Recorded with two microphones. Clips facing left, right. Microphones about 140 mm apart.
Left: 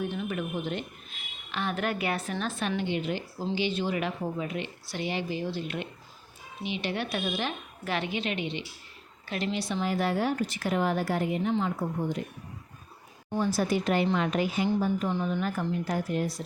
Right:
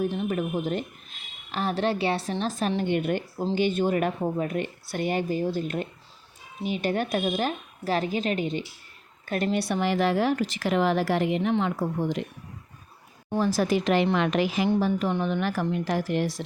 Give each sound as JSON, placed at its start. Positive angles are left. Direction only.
{"t": 0.0, "sound": "a sound", "side_deg": -35}
{"t": 1.5, "sound": "a woman's voice", "side_deg": -40}
{"t": 2.9, "sound": "a woman's voice", "side_deg": -55}
{"t": 13.3, "sound": "a woman's voice", "side_deg": -85}